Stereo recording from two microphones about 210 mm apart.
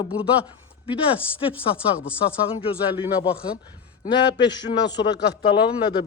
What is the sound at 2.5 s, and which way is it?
Speech, 25° left (ahead or behind).